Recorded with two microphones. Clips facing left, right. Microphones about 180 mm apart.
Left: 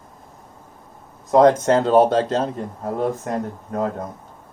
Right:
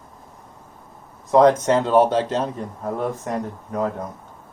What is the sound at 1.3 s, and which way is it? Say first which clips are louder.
Speech: left 1 dB; 45° left (ahead or behind).